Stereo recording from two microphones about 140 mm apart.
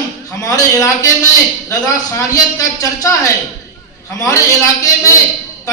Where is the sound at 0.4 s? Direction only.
25° left (ahead or behind).